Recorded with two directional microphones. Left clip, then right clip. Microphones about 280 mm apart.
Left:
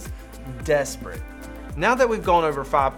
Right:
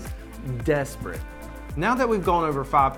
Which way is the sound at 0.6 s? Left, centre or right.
Right.